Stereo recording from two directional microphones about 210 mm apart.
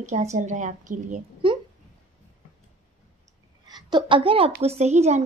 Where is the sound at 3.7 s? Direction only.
20° right (ahead or behind).